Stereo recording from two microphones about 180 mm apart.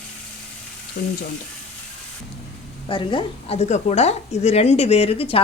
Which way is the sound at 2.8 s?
30° left (ahead or behind).